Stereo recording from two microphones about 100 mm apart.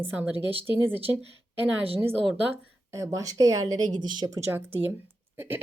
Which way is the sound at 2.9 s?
30° right (ahead or behind).